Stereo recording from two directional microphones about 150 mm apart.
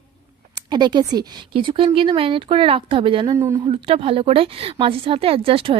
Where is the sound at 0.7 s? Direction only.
30° right (ahead or behind).